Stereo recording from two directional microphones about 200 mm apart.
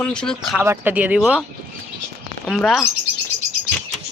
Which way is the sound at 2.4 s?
Centre (ahead or behind).